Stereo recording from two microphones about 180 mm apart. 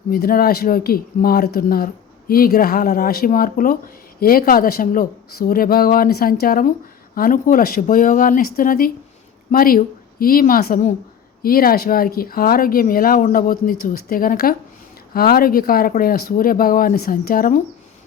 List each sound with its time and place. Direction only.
0.1 s speech: 55° left (ahead or behind)